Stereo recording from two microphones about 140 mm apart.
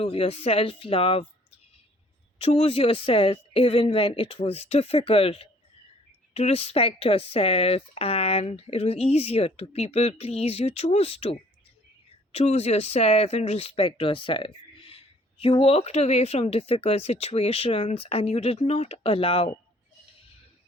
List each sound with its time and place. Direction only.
0.0 s speech: 40° left (ahead or behind)
2.4 s speech: 45° left (ahead or behind)